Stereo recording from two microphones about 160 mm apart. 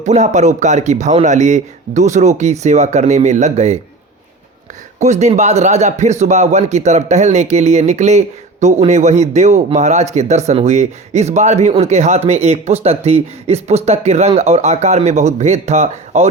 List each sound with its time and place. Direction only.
0.0 s a man's voice: 45° right (ahead or behind)
4.9 s a man's voice: 45° right (ahead or behind)